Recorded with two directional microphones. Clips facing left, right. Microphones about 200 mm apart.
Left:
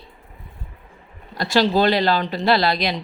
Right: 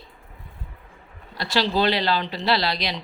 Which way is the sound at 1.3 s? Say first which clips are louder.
Left 5 dB; 45° left (ahead or behind).